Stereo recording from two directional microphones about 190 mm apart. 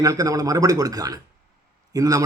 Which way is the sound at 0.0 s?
20° right (ahead or behind).